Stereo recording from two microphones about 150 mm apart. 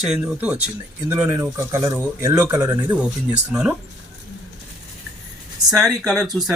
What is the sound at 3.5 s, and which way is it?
Speech, 5° right (ahead or behind).